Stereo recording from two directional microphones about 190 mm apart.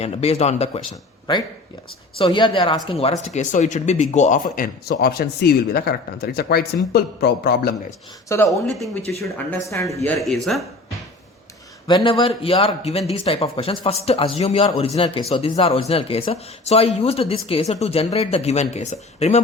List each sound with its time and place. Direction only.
0.0 s speech: 35° left (ahead or behind)
2.1 s a man's voice: 25° left (ahead or behind); by 7.7 s 55° left (ahead or behind)
8.4 s speech: centre (ahead or behind)
9.5 s speech: 15° left (ahead or behind)
10.2 s speech: centre (ahead or behind)
11.9 s a man's voice: 25° left (ahead or behind)